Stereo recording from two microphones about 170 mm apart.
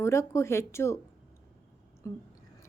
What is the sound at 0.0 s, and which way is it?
Speech, 15° left (ahead or behind).